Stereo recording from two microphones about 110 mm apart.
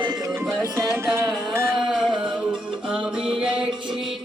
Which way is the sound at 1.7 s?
5° right (ahead or behind).